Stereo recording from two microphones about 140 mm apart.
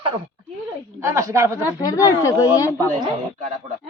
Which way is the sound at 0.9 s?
20° right (ahead or behind).